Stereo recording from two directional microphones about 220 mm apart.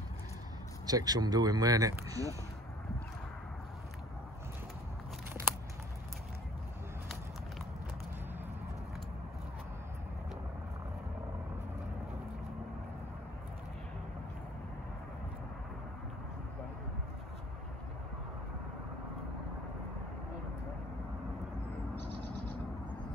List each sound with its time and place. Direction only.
0.8 s speech: 15° right (ahead or behind)